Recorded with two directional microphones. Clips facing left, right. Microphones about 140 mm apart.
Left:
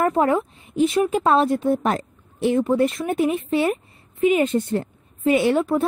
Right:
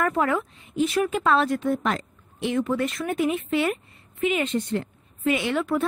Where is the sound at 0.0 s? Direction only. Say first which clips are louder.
Left 5 dB; 30° left (ahead or behind).